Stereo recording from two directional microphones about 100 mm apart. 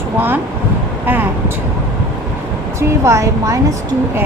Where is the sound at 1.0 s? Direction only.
20° right (ahead or behind).